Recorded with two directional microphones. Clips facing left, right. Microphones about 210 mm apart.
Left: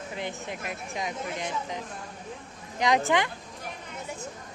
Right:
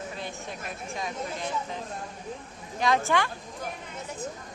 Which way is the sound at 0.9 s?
20° left (ahead or behind).